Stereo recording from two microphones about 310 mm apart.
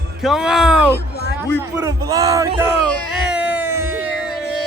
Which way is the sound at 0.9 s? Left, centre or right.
Left.